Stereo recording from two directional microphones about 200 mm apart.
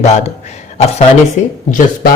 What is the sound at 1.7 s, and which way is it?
Speech, 40° left (ahead or behind).